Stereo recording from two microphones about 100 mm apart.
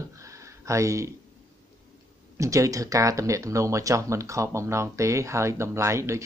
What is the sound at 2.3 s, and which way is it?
Speech, 30° right (ahead or behind).